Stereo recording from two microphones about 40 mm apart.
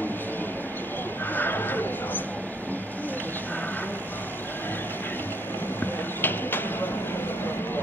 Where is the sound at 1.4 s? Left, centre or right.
Left.